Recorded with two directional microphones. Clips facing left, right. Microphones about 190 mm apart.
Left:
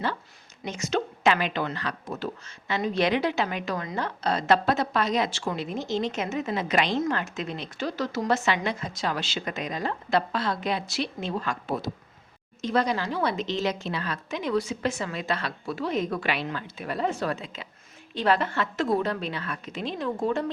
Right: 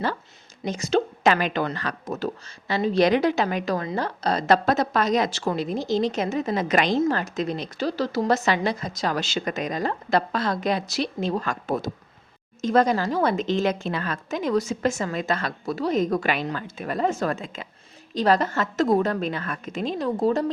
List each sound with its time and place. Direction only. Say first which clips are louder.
0.6 s a woman's voice: right 5 dB; 35° right (ahead or behind)